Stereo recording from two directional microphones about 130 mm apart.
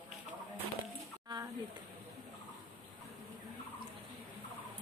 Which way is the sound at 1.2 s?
30° right (ahead or behind).